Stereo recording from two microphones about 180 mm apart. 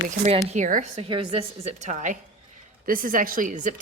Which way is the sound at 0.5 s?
45° right (ahead or behind).